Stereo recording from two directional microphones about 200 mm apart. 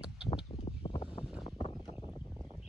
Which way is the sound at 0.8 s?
25° left (ahead or behind).